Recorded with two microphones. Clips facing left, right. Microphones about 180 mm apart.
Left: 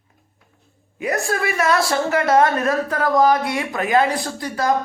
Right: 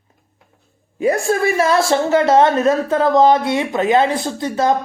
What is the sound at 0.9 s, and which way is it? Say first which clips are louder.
Speech: right 6 dB; 30° right (ahead or behind).